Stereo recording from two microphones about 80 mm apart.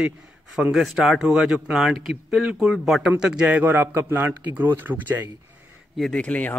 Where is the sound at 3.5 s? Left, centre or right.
Right.